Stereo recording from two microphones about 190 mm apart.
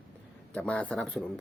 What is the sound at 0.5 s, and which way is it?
Speech, 5° left (ahead or behind).